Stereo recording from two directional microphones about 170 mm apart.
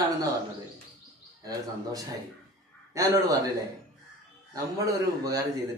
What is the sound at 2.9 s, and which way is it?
Speech, 20° right (ahead or behind).